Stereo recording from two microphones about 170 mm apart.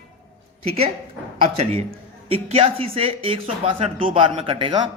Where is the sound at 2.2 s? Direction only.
35° right (ahead or behind).